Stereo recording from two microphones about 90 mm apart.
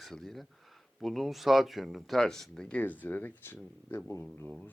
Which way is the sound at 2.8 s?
20° left (ahead or behind).